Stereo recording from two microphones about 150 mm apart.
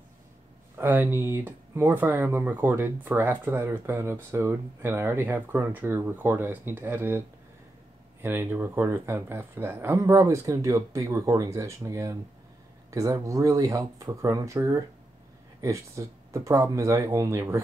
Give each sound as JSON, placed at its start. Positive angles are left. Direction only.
{"t": 0.7, "sound": "speech", "side_deg": -15}